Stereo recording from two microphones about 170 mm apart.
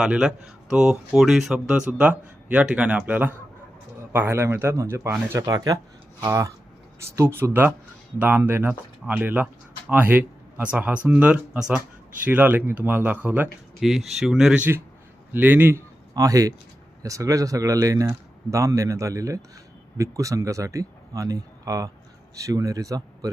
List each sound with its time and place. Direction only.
0.0 s a man's voice: 5° right (ahead or behind); by 23.3 s 20° right (ahead or behind)